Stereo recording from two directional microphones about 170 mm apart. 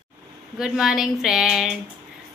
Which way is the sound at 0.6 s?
5° right (ahead or behind).